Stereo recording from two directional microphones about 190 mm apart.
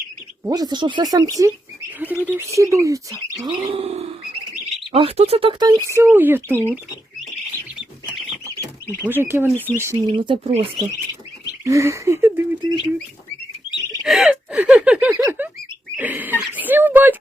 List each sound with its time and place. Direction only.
0.4 s speech: 20° right (ahead or behind)
3.6 s chirp: 30° right (ahead or behind)
4.9 s speech: 30° right (ahead or behind); by 6.7 s 10° right (ahead or behind)
8.0 s rodents: 20° right (ahead or behind)
9.0 s speech: 10° right (ahead or behind)
9.5 s speech: 10° left (ahead or behind)
9.7 s speech: 15° right (ahead or behind)
10.1 s speech: 25° right (ahead or behind)
11.6 s speech: 15° right (ahead or behind)
12.6 s speech: centre (ahead or behind)
14.0 s speech: centre (ahead or behind)